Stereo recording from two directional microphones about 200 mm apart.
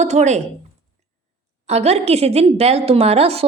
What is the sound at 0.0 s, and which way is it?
Speech, 35° right (ahead or behind).